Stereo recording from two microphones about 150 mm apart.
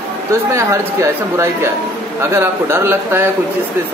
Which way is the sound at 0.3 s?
20° right (ahead or behind).